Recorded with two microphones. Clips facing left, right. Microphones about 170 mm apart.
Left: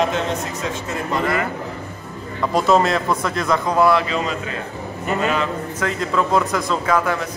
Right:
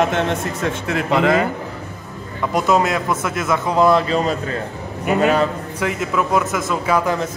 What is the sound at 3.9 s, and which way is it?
Speech, 40° right (ahead or behind).